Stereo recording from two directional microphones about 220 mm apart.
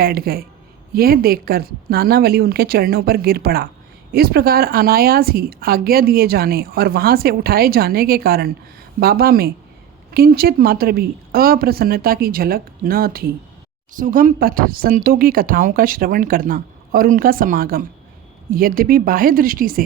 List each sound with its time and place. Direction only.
0.0 s speech: 45° right (ahead or behind)